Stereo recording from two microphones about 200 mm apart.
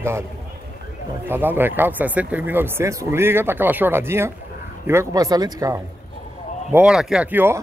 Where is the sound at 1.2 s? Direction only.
10° right (ahead or behind).